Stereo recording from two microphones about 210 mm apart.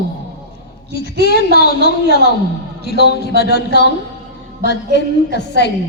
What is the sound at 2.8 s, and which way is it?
Speech, 50° left (ahead or behind).